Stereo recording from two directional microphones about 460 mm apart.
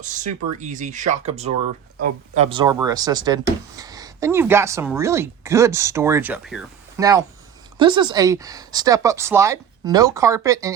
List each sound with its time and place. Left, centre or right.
0.0 s speech: centre